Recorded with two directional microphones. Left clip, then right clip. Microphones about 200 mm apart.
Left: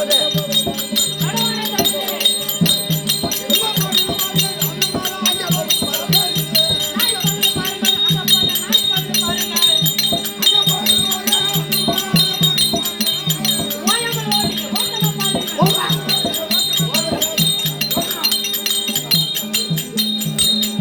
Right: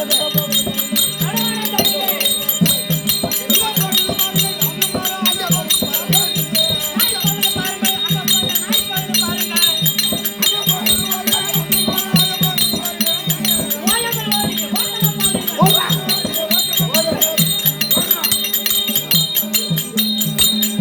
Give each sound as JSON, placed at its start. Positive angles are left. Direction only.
{"t": 0.1, "sound": "music", "side_deg": 20}
{"t": 2.6, "sound": "music", "side_deg": 20}
{"t": 15.5, "sound": "music", "side_deg": 15}